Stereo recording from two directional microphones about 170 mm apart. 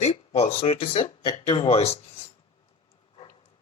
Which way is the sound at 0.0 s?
40° left (ahead or behind).